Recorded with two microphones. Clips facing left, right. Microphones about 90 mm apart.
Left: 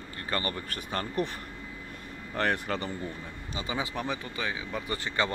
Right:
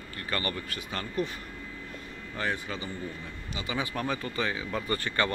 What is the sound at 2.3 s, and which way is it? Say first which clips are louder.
Speech: left 4 dB; 60° left (ahead or behind).